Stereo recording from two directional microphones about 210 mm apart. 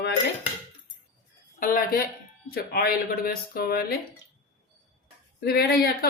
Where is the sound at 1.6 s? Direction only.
40° left (ahead or behind).